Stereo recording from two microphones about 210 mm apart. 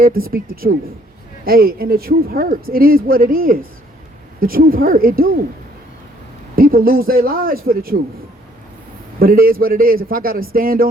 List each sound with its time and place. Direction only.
0.0 s speech: 45° right (ahead or behind)
6.6 s speech: 45° right (ahead or behind)
9.1 s speech: 45° right (ahead or behind)